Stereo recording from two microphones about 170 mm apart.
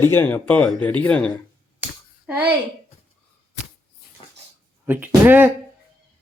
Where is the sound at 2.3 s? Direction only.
10° right (ahead or behind).